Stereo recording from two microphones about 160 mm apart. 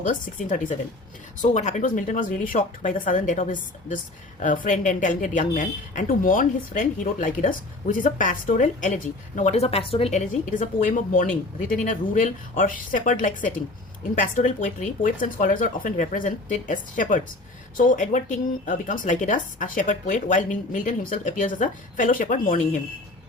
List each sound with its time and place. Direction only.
0.1 s speech: 55° left (ahead or behind)